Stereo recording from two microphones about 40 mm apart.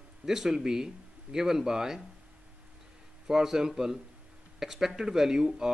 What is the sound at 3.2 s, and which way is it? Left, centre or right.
Speech, centre.